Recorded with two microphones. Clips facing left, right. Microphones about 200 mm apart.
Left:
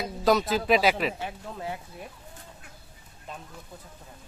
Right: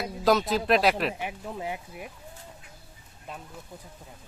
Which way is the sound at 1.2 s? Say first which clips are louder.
Right 1 dB; 15° right (ahead or behind).